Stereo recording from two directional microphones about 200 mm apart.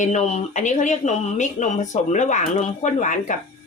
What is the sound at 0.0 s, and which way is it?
Speech, 35° left (ahead or behind).